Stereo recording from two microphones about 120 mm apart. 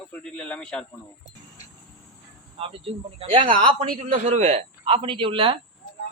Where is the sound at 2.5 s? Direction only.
50° right (ahead or behind).